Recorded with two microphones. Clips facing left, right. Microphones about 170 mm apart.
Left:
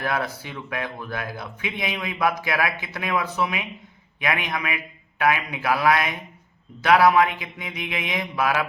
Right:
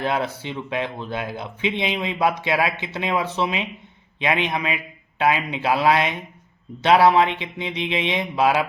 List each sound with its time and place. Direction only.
0.0 s speech: 25° right (ahead or behind)